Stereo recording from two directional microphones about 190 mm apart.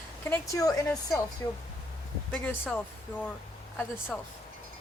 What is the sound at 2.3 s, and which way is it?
Speech, 5° left (ahead or behind).